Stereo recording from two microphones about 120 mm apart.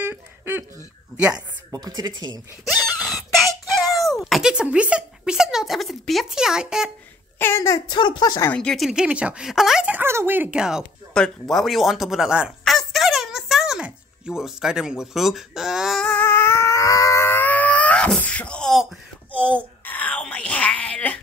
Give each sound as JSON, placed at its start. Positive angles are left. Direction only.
{"t": 0.0, "sound": "a sound", "side_deg": -15}
{"t": 1.3, "sound": "speech", "side_deg": -35}
{"t": 2.6, "sound": "a sound", "side_deg": 0}
{"t": 3.8, "sound": "speech", "side_deg": 0}
{"t": 7.3, "sound": "speech", "side_deg": 20}
{"t": 7.9, "sound": "speech", "side_deg": 40}
{"t": 8.5, "sound": "speech", "side_deg": 5}
{"t": 11.1, "sound": "speech", "side_deg": 5}
{"t": 16.0, "sound": "a sound", "side_deg": 10}